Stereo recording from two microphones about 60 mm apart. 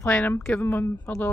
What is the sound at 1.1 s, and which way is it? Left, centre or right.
Speech, left.